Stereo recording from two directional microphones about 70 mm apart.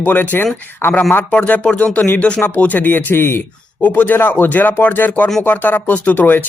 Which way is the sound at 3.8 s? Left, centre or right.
Left.